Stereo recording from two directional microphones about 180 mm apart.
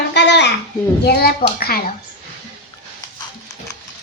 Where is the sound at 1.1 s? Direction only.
60° left (ahead or behind).